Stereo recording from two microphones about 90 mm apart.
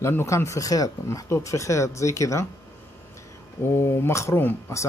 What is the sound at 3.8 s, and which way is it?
Speech, 30° left (ahead or behind).